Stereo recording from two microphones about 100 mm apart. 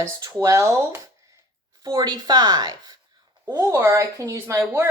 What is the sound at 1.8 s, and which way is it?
A woman's voice, 50° right (ahead or behind).